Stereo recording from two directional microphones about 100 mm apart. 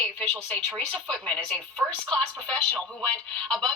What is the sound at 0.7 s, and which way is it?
Speech, 5° left (ahead or behind).